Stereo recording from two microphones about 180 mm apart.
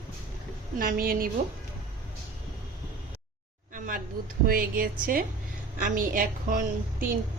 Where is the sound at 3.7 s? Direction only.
50° right (ahead or behind).